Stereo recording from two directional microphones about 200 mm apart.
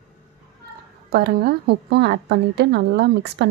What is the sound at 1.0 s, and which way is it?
A woman's voice, 50° right (ahead or behind).